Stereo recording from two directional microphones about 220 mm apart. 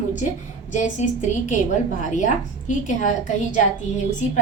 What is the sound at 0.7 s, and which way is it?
A woman's voice, 35° left (ahead or behind).